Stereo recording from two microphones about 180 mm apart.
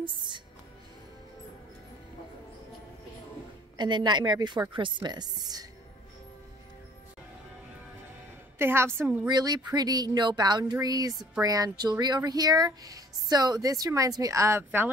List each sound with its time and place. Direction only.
0.0 s music: 25° right (ahead or behind)
3.7 s speech: 25° right (ahead or behind)
8.5 s a woman's voice: 15° right (ahead or behind)
9.3 s speech: 25° right (ahead or behind)